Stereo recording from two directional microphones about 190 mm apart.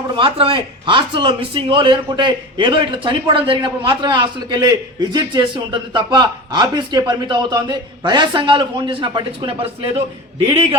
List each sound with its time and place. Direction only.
0.2 s a man's voice: 25° right (ahead or behind)